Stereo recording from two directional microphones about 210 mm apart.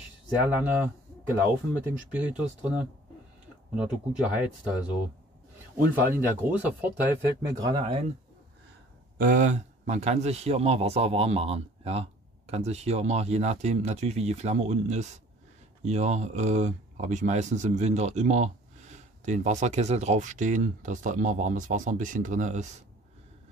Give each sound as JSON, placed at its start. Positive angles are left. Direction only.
{"t": 0.5, "sound": "speech", "side_deg": -5}
{"t": 2.0, "sound": "speech", "side_deg": -5}
{"t": 6.1, "sound": "speech", "side_deg": -10}
{"t": 9.2, "sound": "speech", "side_deg": -35}